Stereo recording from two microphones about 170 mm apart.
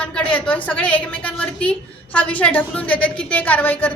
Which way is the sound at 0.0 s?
5° left (ahead or behind).